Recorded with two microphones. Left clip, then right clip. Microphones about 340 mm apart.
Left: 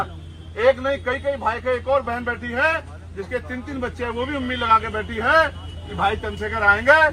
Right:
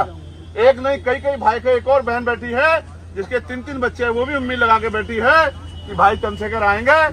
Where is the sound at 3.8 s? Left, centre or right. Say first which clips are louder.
Right 8 dB; right.